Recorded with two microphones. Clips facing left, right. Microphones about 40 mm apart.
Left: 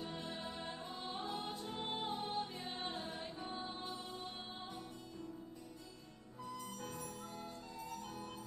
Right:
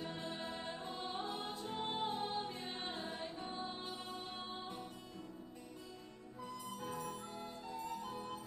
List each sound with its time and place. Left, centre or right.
0.0 s music: centre
6.4 s music: centre